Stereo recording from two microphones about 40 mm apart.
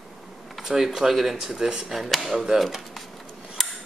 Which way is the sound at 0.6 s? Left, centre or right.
Centre.